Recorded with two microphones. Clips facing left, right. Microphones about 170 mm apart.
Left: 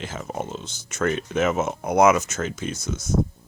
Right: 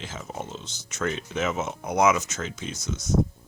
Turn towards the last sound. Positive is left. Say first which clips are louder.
# left 3 dB
turn(degrees=50)  # may be behind; listen again after turning